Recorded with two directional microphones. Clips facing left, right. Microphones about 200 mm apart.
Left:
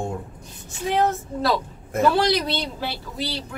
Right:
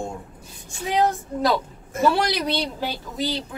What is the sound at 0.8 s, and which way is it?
A woman's voice, 15° right (ahead or behind).